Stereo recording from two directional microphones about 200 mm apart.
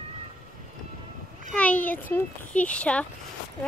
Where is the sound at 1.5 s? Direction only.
5° left (ahead or behind).